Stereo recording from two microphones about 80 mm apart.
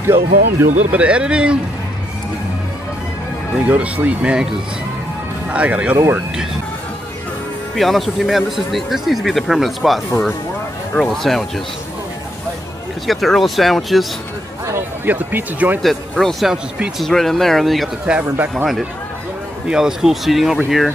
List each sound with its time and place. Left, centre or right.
0.0 s speech: right
0.9 s speech: centre
3.6 s speech: centre
7.7 s speech: centre
13.0 s speech: centre
15.0 s speech: right
15.8 s speech: centre
18.2 s speech: right
19.7 s speech: centre